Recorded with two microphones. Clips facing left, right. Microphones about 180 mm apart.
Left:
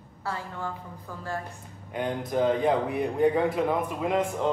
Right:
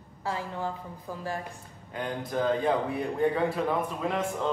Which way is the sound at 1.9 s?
20° left (ahead or behind).